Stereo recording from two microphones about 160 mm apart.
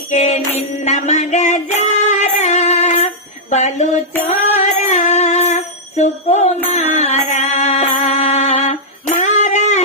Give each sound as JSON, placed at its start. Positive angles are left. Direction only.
{"t": 0.1, "sound": "music", "side_deg": 50}
{"t": 3.5, "sound": "mantra", "side_deg": 45}
{"t": 4.3, "sound": "music", "side_deg": 50}
{"t": 9.2, "sound": "a sound", "side_deg": 50}